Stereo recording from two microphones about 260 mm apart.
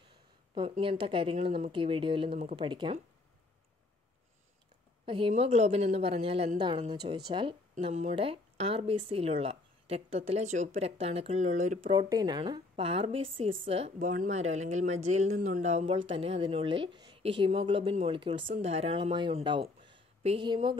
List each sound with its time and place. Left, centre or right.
0.6 s speech: centre
5.0 s speech: centre